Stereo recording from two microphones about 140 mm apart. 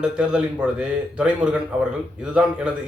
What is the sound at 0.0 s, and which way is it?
A man's voice, 5° right (ahead or behind).